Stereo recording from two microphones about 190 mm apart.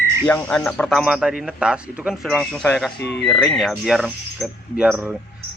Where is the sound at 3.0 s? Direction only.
65° left (ahead or behind).